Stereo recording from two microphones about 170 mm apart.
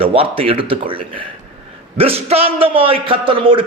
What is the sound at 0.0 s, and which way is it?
A man's voice, 35° right (ahead or behind).